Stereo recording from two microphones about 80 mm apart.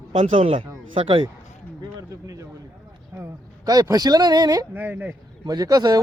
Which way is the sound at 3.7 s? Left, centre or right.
Right.